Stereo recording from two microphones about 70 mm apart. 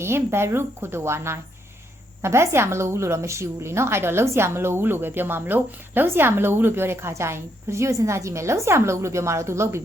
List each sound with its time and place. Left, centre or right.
0.0 s a woman's voice: right